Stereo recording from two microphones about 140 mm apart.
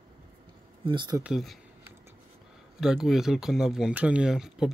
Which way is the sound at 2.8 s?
5° right (ahead or behind).